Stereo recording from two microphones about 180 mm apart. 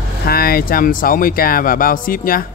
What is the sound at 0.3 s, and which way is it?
Speech, 55° left (ahead or behind).